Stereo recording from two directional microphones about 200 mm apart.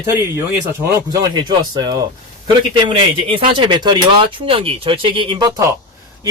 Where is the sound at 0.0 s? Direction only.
15° right (ahead or behind).